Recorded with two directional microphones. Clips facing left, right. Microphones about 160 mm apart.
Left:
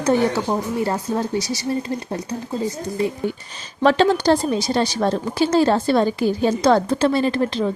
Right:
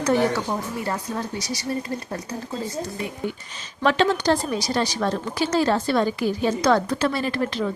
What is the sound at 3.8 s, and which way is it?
A woman's voice, 35° left (ahead or behind).